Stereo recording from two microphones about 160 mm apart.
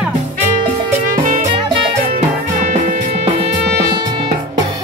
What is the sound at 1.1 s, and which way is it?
Music, 50° right (ahead or behind).